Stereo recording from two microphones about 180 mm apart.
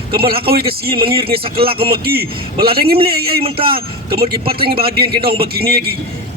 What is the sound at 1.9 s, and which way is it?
Speech, 55° right (ahead or behind).